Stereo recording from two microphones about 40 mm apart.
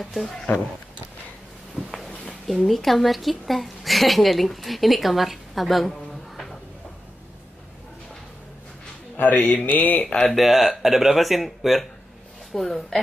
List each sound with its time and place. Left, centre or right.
0.0 s speech: centre
1.8 s a sound: centre
2.2 s a woman's voice: centre
9.1 s speech: left
10.2 s speech: centre